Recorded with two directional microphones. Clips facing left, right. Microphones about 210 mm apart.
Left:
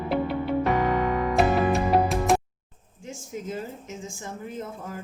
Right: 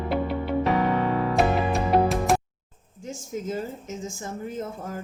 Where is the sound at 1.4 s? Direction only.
Centre (ahead or behind).